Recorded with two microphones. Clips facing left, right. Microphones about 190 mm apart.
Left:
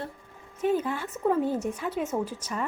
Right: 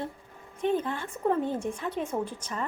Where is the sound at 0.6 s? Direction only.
10° left (ahead or behind).